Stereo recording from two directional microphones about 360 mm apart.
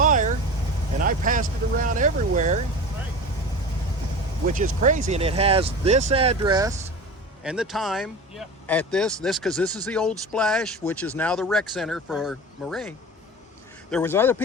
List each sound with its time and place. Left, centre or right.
0.0 s vehicle: right
1.0 s speech: right
4.4 s speech: right; by 12.9 s centre
13.9 s speech: centre